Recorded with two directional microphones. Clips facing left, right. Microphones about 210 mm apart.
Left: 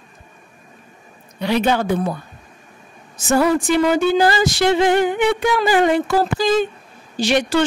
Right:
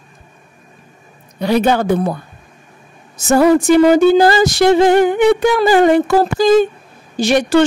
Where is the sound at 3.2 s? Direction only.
40° right (ahead or behind).